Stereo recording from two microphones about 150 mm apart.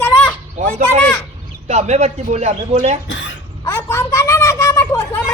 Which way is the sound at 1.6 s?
50° right (ahead or behind).